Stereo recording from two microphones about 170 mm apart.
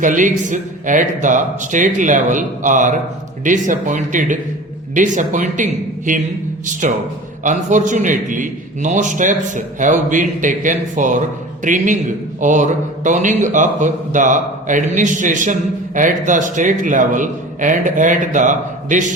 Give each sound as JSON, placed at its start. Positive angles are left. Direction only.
{"t": 0.0, "sound": "a man's voice", "side_deg": -50}
{"t": 6.7, "sound": "a man's voice", "side_deg": -50}